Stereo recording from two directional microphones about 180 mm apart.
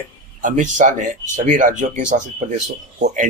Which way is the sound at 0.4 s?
45° right (ahead or behind).